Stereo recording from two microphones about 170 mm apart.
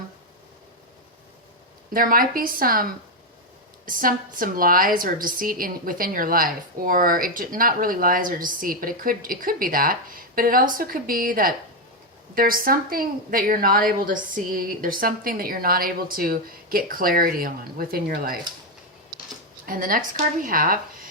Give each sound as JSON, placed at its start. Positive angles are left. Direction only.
{"t": 1.9, "sound": "a woman's voice", "side_deg": -55}
{"t": 19.6, "sound": "a woman's voice", "side_deg": -55}